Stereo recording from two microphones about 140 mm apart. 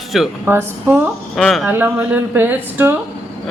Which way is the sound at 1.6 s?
15° right (ahead or behind).